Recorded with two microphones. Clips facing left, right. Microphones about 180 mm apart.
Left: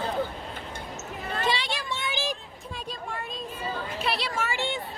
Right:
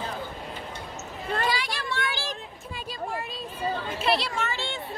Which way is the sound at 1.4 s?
25° left (ahead or behind).